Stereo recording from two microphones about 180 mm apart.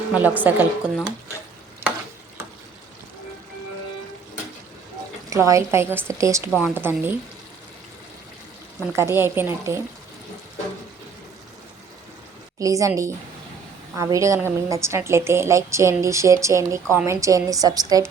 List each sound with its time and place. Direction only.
0.1 s a woman's voice: 10° right (ahead or behind)
5.3 s a woman's voice: 15° right (ahead or behind)
8.9 s a woman's voice: 15° right (ahead or behind)
12.5 s a woman's voice: 20° right (ahead or behind)